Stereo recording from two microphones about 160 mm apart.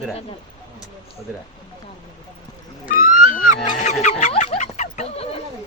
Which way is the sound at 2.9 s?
60° left (ahead or behind).